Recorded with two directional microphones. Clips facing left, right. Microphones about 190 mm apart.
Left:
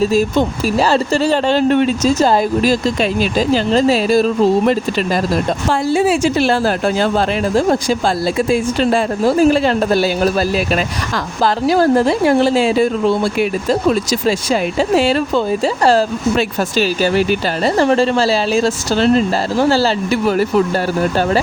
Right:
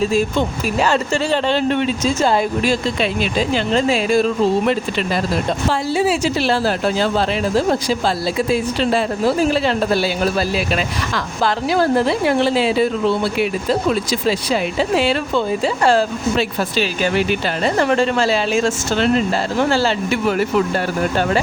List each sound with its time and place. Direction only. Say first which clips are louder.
0.1 s speech: left 3 dB; 40° left (ahead or behind)
5.9 s speech: left 5 dB; 50° left (ahead or behind); by 21.4 s 35° left (ahead or behind)